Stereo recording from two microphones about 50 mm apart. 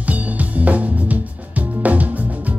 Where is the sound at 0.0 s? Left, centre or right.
Right.